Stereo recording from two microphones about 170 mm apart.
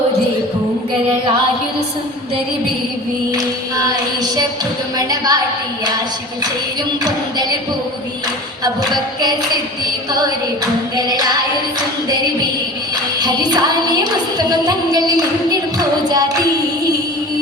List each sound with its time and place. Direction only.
3.8 s child singing: 20° right (ahead or behind)
10.9 s singing: 25° right (ahead or behind)
13.1 s music: 25° right (ahead or behind)
15.8 s child singing: 20° right (ahead or behind)